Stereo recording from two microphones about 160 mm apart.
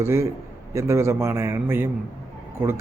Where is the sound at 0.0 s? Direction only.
15° right (ahead or behind).